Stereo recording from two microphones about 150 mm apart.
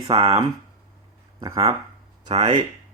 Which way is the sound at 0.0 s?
40° right (ahead or behind).